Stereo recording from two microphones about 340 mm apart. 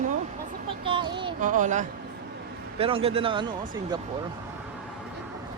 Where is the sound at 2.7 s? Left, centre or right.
Centre.